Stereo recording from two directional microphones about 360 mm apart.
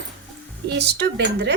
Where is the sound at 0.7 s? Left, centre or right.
Right.